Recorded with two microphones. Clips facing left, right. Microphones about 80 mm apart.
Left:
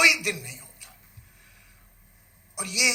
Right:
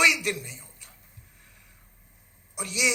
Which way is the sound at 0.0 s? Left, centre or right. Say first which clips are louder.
Even; right.